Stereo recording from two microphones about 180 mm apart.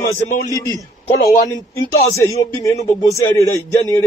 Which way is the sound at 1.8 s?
15° left (ahead or behind).